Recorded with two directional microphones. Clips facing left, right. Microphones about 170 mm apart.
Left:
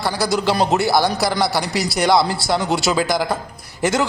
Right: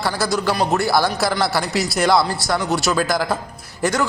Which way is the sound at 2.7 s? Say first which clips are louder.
Even; 10° left (ahead or behind).